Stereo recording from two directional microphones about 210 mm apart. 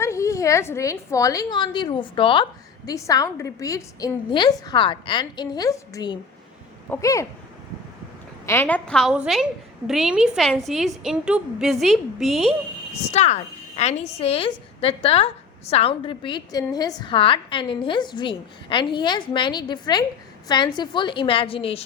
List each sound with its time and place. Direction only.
0.0 s a woman's voice: 15° left (ahead or behind)
8.4 s a woman's voice: 10° left (ahead or behind)
13.1 s a woman's voice: 35° left (ahead or behind)